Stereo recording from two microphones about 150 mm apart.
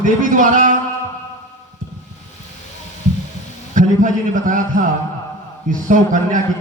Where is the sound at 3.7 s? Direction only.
60° right (ahead or behind).